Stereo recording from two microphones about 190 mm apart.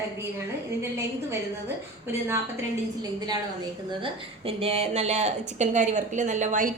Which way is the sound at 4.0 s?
30° right (ahead or behind).